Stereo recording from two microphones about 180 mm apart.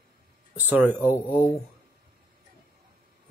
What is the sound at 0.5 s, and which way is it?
Speech, 10° right (ahead or behind).